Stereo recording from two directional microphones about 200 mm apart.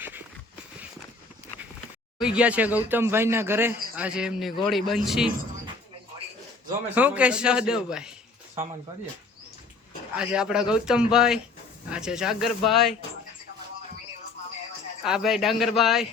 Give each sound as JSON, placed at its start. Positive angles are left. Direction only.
{"t": 2.1, "sound": "speech", "side_deg": -5}
{"t": 6.9, "sound": "speech", "side_deg": -5}
{"t": 10.2, "sound": "speech", "side_deg": -5}
{"t": 15.0, "sound": "speech", "side_deg": 0}